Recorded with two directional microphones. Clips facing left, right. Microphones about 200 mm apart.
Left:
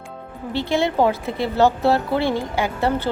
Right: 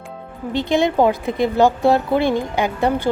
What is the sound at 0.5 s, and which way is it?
A woman's voice, 15° right (ahead or behind).